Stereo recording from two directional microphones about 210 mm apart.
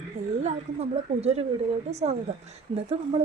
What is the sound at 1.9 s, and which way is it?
Speech, 30° right (ahead or behind).